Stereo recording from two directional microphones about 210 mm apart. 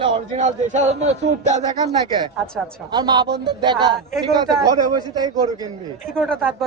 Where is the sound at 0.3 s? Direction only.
35° right (ahead or behind).